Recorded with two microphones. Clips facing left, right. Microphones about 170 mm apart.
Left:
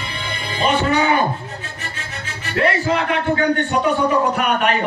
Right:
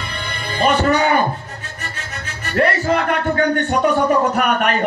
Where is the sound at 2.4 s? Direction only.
50° right (ahead or behind).